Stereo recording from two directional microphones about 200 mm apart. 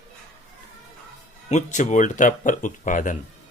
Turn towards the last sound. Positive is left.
turn(degrees=40)  # may be behind; listen again after turning